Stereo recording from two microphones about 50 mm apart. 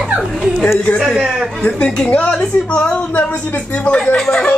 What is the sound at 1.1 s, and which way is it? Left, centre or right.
Speech, centre.